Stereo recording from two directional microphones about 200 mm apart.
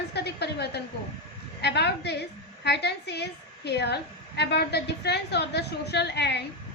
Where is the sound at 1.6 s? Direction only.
55° left (ahead or behind).